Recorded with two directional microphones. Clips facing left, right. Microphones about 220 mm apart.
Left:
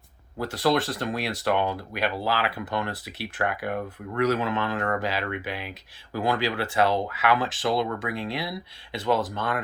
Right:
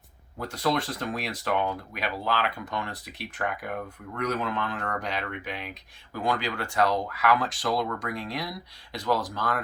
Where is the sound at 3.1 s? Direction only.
Centre (ahead or behind).